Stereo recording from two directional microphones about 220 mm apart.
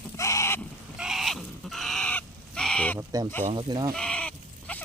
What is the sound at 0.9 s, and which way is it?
Fowl, centre (ahead or behind).